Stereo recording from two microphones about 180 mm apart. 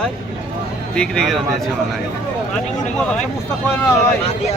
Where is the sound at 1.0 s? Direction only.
Centre (ahead or behind).